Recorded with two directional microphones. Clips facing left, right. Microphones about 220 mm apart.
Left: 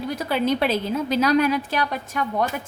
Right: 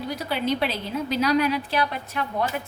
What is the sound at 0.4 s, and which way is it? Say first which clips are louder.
A woman's voice: left 4 dB; 45° left (ahead or behind).